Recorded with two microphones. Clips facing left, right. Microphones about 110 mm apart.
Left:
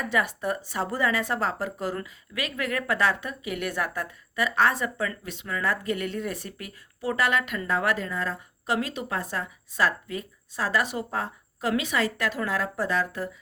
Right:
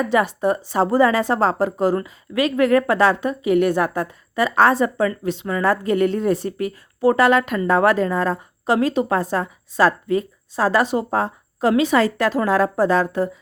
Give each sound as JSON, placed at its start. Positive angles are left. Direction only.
{"t": 0.0, "sound": "a woman's voice", "side_deg": -25}